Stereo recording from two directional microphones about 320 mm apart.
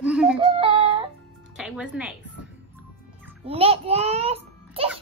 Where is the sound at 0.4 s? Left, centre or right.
Centre.